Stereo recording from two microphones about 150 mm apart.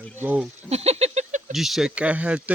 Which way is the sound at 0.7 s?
45° right (ahead or behind).